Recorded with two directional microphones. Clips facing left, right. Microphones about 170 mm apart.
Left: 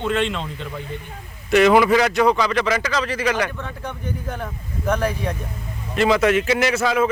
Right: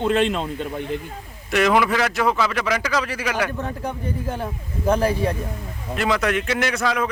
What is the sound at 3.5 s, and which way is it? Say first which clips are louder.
Speech: right 4 dB; 35° right (ahead or behind).